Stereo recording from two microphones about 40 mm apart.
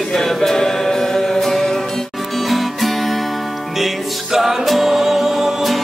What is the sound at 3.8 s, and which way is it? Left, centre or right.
Music, centre.